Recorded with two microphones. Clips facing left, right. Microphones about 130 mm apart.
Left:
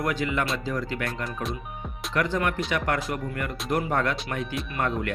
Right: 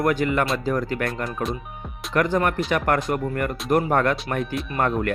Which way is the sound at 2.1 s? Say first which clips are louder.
Right 5 dB; 50° right (ahead or behind).